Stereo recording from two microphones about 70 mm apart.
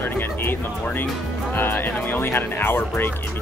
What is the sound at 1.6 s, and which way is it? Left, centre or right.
Speech, left.